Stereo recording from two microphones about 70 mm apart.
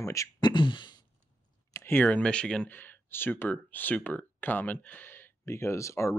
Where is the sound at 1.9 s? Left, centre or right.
Left.